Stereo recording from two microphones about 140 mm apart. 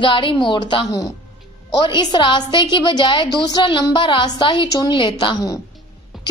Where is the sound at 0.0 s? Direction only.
35° left (ahead or behind).